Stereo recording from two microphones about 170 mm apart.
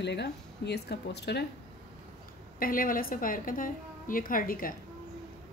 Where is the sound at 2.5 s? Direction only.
55° left (ahead or behind).